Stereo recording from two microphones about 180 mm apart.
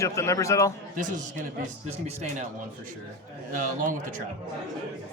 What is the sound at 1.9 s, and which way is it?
Speech, 35° right (ahead or behind).